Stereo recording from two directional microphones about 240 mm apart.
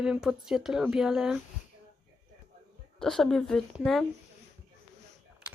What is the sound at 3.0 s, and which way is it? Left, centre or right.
Speech, centre.